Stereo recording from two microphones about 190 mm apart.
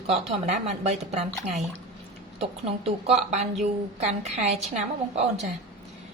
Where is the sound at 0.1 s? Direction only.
35° right (ahead or behind).